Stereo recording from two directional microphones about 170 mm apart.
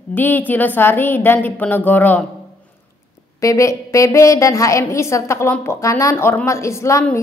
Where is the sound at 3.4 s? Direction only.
20° left (ahead or behind).